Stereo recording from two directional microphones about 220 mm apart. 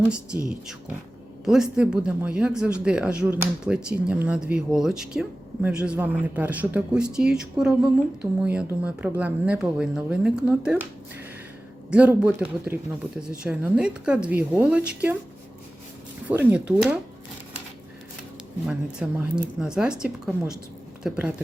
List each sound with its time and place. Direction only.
0.0 s speech: 5° right (ahead or behind)
11.9 s speech: 5° right (ahead or behind)
16.3 s speech: 5° right (ahead or behind)
18.6 s speech: 5° right (ahead or behind)